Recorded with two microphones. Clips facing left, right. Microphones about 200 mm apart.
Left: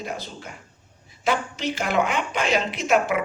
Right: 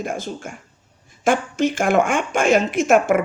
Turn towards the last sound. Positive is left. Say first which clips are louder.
# right 6 dB
turn(degrees=-50)  # may be behind; listen again after turning